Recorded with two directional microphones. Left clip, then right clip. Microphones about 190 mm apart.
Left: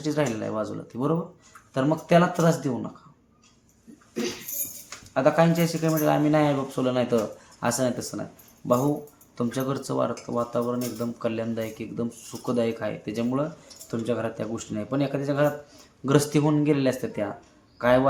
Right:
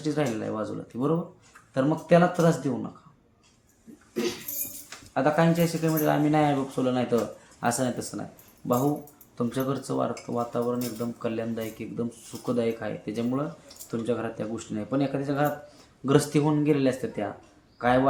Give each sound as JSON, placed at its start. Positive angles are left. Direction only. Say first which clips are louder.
{"t": 0.0, "sound": "speech", "louder": "left 2 dB", "side_deg": 20}
{"t": 5.1, "sound": "speech", "louder": "left 2 dB", "side_deg": 20}
{"t": 9.4, "sound": "a man's voice", "louder": "left 1 dB", "side_deg": 20}